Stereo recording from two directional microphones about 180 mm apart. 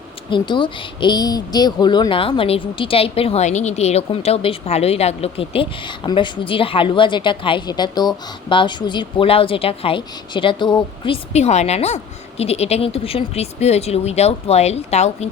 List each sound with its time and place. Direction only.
0.3 s speech: 25° left (ahead or behind)